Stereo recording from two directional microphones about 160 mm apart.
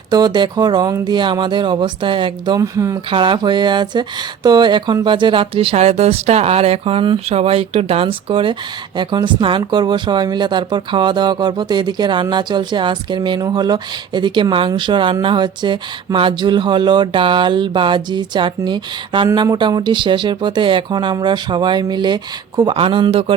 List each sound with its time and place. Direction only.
0.1 s speech: 25° right (ahead or behind)
2.6 s speech: 20° right (ahead or behind)
3.1 s speech: 30° right (ahead or behind)